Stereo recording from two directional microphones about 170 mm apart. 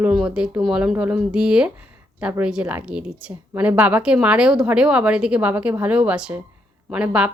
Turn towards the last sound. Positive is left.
turn(degrees=-5)  # may be behind; listen again after turning